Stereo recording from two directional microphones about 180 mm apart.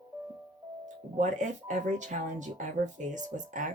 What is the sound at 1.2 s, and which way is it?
Speech, 45° right (ahead or behind).